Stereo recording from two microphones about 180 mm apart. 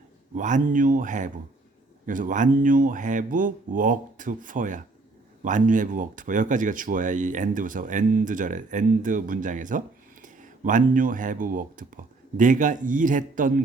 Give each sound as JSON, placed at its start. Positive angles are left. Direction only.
{"t": 0.3, "sound": "speech", "side_deg": -45}